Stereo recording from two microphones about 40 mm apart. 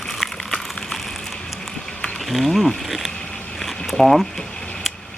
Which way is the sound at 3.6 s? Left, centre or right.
Centre.